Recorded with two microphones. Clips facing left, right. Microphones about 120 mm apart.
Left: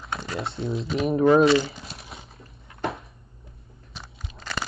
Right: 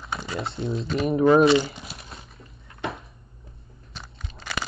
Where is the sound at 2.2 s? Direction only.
25° left (ahead or behind).